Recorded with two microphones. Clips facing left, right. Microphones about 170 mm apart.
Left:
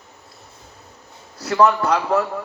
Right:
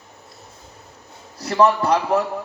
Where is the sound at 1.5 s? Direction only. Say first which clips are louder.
Even; 25° right (ahead or behind).